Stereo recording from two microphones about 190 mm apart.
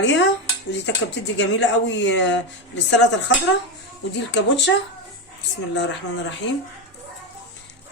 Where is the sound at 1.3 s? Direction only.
70° left (ahead or behind).